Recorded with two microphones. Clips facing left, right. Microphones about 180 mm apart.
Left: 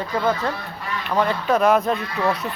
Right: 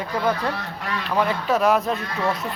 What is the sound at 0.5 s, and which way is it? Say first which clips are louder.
Speech: right 1 dB; 75° right (ahead or behind).